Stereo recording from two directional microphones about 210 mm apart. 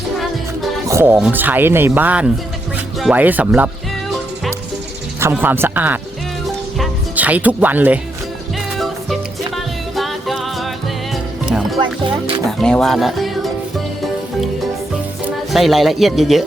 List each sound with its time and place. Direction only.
0.9 s speech: 10° right (ahead or behind)
5.2 s speech: 10° right (ahead or behind)
9.9 s music: centre (ahead or behind)
11.8 s music: 25° right (ahead or behind)
12.5 s speech: centre (ahead or behind)
15.5 s speech: centre (ahead or behind)